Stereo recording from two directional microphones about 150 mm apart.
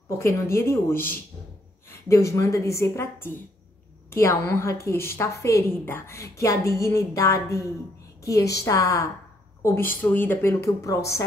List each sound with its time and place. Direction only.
0.2 s a woman's voice: 20° left (ahead or behind)